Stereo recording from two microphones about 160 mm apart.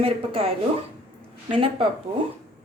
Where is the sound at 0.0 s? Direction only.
35° right (ahead or behind).